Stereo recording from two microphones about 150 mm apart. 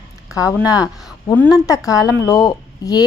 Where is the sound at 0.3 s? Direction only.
25° left (ahead or behind).